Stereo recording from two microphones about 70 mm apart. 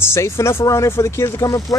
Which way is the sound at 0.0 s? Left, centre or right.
Left.